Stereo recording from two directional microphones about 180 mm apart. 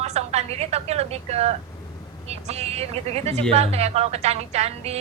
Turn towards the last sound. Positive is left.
turn(degrees=-35)  # may be behind; listen again after turning